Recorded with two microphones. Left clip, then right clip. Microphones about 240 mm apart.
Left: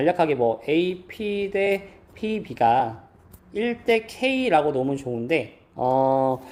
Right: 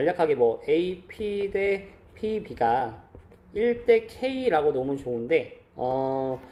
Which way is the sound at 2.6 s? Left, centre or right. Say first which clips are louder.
Left 5 dB; left.